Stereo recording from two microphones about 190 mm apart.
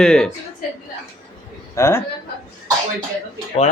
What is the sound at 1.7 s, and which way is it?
Speech, 15° left (ahead or behind).